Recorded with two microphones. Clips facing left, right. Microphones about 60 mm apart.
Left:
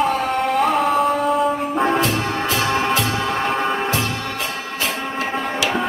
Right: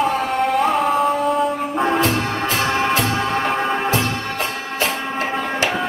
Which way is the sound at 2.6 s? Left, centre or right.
Right.